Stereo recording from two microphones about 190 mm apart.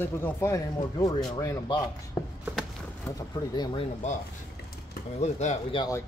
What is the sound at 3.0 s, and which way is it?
Speech, 20° left (ahead or behind).